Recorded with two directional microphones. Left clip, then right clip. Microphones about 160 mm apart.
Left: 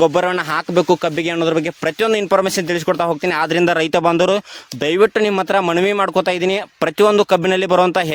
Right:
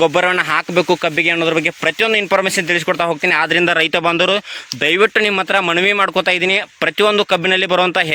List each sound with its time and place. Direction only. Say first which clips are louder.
0.0 s a man's voice: right 1 dB; 20° left (ahead or behind)
2.0 s speech: left 1 dB; 40° left (ahead or behind)